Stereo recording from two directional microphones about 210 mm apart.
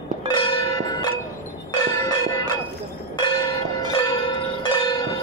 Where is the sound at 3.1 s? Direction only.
20° left (ahead or behind).